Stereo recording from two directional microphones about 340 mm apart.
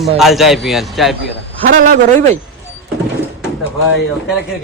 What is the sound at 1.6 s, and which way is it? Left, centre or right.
Speech, right.